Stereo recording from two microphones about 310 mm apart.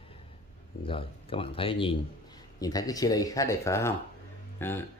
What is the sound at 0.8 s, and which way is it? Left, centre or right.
Speech, centre.